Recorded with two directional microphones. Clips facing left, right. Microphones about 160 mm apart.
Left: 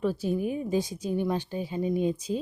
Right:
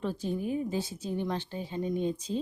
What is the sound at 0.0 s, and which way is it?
Speech, 10° left (ahead or behind).